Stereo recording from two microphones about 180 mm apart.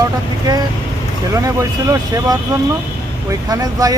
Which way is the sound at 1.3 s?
15° right (ahead or behind).